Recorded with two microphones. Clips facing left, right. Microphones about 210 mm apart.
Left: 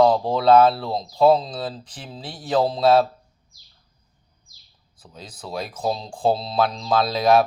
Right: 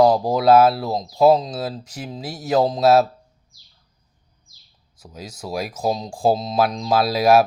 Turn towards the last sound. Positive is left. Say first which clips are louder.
# right 2 dB
turn(degrees=-5)  # may be behind; listen again after turning